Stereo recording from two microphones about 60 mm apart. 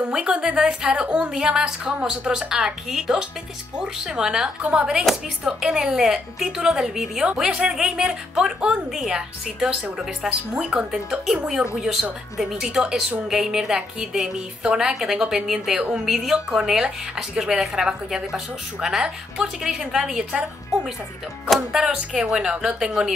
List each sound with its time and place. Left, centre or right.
0.1 s a woman's voice: centre
10.8 s a woman's voice: centre
21.7 s a woman's voice: centre